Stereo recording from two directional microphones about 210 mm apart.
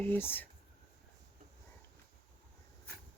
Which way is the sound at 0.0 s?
10° left (ahead or behind).